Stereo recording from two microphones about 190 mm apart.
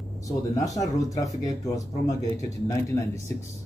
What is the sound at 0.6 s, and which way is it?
Speech, 15° left (ahead or behind).